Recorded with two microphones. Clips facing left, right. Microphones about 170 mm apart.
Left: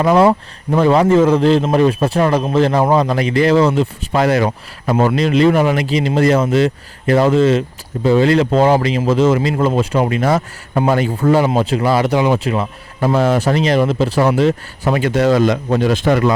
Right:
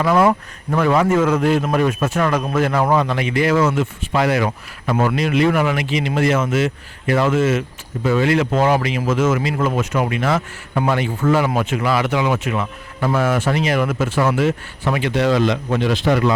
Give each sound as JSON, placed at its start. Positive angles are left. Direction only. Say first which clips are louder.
{"t": 0.0, "sound": "speech", "louder": "left 4 dB", "side_deg": 30}